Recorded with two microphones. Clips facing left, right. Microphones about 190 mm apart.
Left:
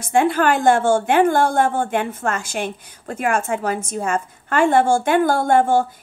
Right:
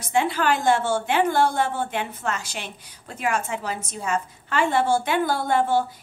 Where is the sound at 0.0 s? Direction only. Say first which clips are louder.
Left 6 dB; 50° left (ahead or behind).